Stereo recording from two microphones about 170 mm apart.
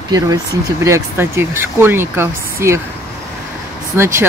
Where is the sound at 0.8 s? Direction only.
15° right (ahead or behind).